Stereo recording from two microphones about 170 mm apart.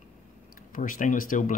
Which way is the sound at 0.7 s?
50° left (ahead or behind).